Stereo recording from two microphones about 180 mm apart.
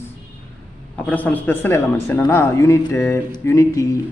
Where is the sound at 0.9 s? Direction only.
10° left (ahead or behind).